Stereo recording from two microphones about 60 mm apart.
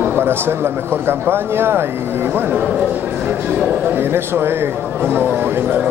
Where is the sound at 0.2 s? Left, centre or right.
Right.